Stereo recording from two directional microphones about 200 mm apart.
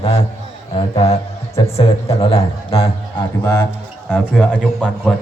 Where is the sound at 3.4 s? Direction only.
15° left (ahead or behind).